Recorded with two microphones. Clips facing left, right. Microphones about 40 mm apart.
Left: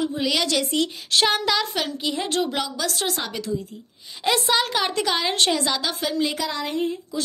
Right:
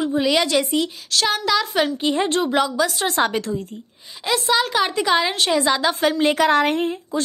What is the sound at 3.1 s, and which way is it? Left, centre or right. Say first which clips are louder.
Speech: right 9 dB; right.